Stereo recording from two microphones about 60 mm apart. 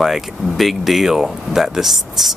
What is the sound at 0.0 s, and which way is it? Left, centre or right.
Speech, centre.